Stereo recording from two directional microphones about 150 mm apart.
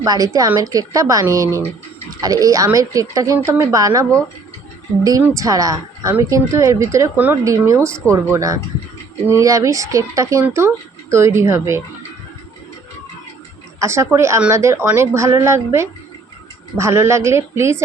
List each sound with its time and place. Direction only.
0.0 s a woman's voice: 25° right (ahead or behind)
5.2 s a woman's voice: 20° right (ahead or behind)
7.9 s speech: 5° left (ahead or behind)
8.1 s a woman's voice: 20° right (ahead or behind)
13.7 s speech: 20° right (ahead or behind)